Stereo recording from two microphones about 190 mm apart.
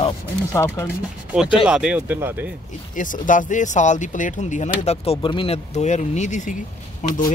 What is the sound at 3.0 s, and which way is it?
Speech, 45° left (ahead or behind).